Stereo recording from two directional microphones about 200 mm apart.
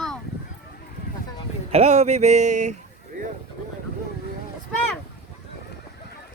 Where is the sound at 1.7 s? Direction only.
30° right (ahead or behind).